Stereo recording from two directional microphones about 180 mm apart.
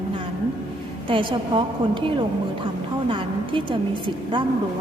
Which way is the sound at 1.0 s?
30° right (ahead or behind).